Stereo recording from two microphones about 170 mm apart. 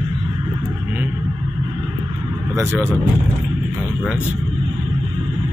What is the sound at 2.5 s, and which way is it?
Speech, 15° right (ahead or behind).